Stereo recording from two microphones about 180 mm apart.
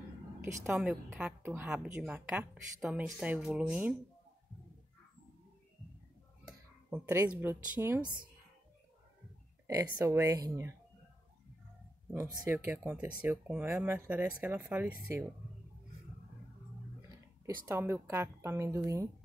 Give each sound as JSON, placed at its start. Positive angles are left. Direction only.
{"t": 0.4, "sound": "a woman's voice", "side_deg": -15}
{"t": 6.4, "sound": "speech", "side_deg": -10}
{"t": 9.8, "sound": "a woman's voice", "side_deg": -15}
{"t": 12.1, "sound": "a woman's voice", "side_deg": -10}
{"t": 17.6, "sound": "a woman's voice", "side_deg": -15}